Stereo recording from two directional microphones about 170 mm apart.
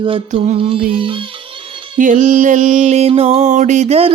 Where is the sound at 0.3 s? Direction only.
30° right (ahead or behind).